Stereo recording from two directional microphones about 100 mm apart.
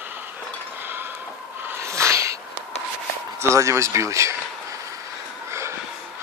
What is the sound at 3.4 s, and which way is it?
Speech, 30° right (ahead or behind).